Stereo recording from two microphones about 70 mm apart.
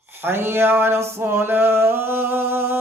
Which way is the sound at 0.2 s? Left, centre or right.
Right.